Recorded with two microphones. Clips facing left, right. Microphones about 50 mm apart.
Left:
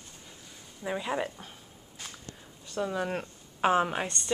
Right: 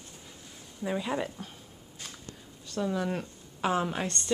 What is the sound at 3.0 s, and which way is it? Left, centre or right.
Speech, left.